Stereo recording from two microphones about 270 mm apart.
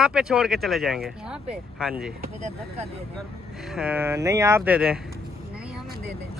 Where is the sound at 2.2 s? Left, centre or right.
Right.